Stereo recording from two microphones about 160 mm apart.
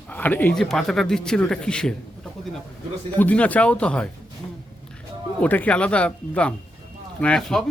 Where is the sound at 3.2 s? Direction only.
10° left (ahead or behind).